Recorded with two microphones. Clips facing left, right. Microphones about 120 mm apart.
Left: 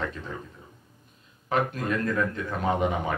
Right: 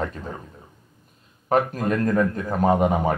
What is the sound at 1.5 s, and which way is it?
A man's voice, 40° right (ahead or behind).